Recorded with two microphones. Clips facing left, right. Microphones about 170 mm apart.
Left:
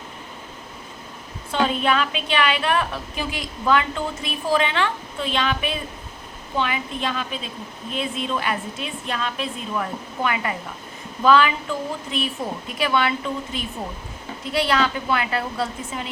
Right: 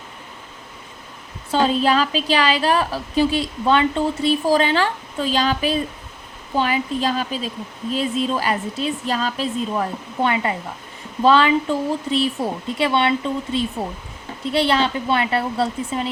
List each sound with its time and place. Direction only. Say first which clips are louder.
1.5 s a woman's voice: right 4 dB; 35° right (ahead or behind)